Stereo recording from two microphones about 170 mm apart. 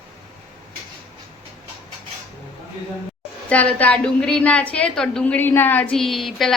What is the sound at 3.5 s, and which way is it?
A woman's voice, 10° left (ahead or behind).